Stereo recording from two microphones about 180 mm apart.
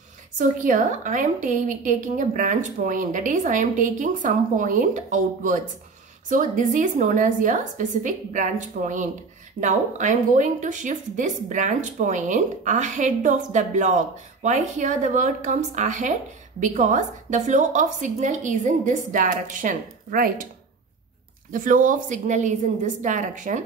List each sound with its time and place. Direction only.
0.4 s a woman's voice: 45° right (ahead or behind)
21.5 s a woman's voice: 50° right (ahead or behind)